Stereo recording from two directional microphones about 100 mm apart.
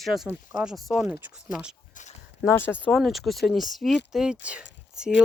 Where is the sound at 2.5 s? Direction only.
20° left (ahead or behind).